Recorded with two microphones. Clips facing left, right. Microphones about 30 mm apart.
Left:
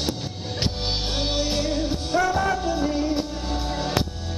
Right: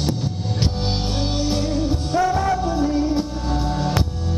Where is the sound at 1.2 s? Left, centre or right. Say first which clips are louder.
Right 1 dB; left.